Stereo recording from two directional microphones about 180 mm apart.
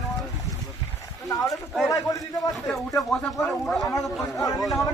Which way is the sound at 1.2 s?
20° left (ahead or behind).